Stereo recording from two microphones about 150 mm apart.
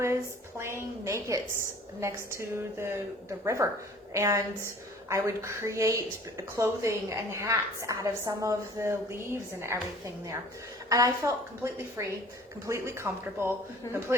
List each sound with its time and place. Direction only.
0.6 s a woman's voice: 20° right (ahead or behind)
10.8 s a woman's voice: 20° right (ahead or behind)